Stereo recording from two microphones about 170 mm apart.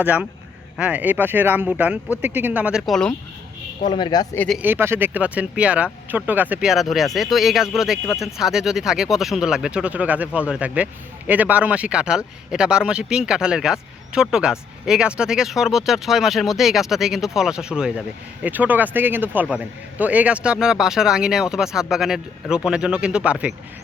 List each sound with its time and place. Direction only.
0.0 s speech: 10° right (ahead or behind)
3.8 s speech: 25° left (ahead or behind)
4.4 s a man's voice: centre (ahead or behind)
4.6 s a man's voice: 15° right (ahead or behind)